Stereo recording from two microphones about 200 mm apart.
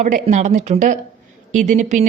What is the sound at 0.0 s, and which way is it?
A woman's voice, 40° right (ahead or behind).